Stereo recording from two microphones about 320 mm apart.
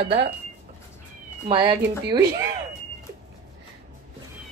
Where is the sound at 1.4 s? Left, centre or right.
Centre.